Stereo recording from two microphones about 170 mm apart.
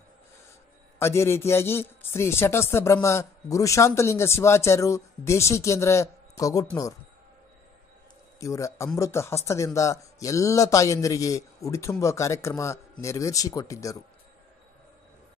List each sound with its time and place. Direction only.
0.9 s a man's voice: 15° left (ahead or behind)
8.4 s a man's voice: 20° left (ahead or behind)